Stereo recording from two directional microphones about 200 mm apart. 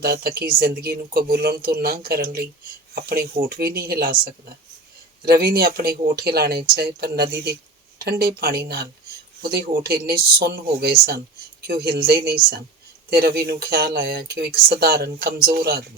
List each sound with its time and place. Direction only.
0.0 s speech: 50° right (ahead or behind)